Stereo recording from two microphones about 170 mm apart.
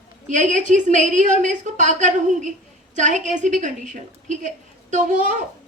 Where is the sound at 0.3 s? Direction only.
45° right (ahead or behind).